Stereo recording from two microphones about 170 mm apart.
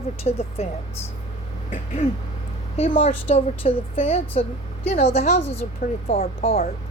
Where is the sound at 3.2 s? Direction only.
35° left (ahead or behind).